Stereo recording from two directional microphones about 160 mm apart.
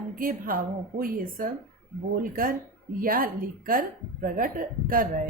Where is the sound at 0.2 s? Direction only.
60° right (ahead or behind).